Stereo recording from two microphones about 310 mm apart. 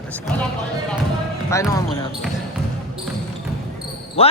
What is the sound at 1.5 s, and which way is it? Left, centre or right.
Speech, centre.